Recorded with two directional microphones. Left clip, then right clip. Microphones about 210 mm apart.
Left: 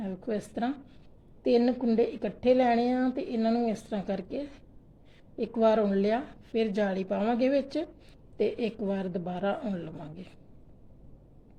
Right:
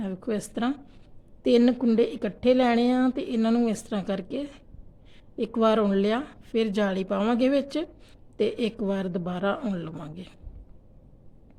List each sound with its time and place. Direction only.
0.0 s a woman's voice: 25° right (ahead or behind)